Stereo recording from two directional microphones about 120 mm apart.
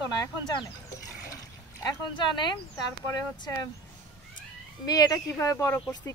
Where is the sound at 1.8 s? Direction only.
40° left (ahead or behind).